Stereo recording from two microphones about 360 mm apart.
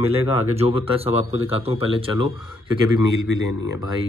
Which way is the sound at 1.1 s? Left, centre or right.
Left.